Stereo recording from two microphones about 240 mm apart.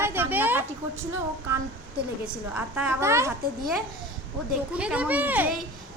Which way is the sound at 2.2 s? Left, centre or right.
Centre.